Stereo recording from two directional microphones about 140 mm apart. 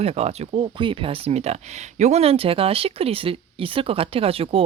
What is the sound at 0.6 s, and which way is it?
Speech, 35° right (ahead or behind).